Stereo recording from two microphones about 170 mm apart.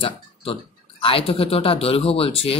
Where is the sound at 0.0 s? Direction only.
35° left (ahead or behind).